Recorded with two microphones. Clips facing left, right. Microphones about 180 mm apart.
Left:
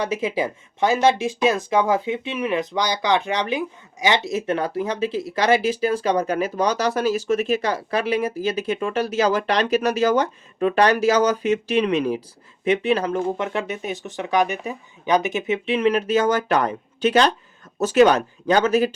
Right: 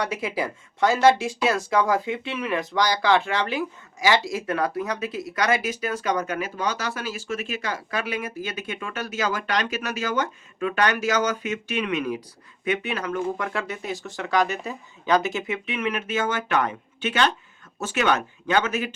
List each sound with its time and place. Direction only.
0.0 s speech: 20° left (ahead or behind)